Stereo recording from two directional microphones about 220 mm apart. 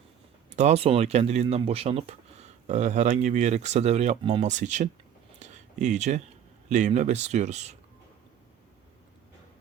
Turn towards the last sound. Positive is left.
turn(degrees=-30)  # may be behind; listen again after turning